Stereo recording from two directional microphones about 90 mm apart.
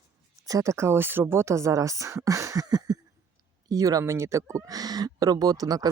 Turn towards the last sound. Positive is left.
turn(degrees=-45)  # may be behind; listen again after turning